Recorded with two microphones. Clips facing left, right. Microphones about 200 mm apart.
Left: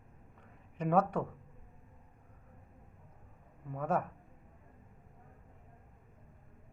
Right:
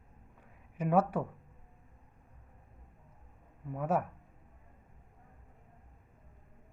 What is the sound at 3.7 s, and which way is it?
Speech, 5° right (ahead or behind).